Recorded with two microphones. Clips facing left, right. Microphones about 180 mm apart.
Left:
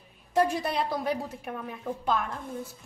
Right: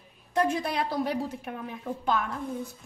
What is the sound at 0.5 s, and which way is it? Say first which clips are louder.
A woman's voice: right 1 dB; centre (ahead or behind).